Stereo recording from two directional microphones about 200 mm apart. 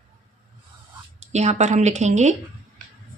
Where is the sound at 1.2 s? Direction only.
35° right (ahead or behind).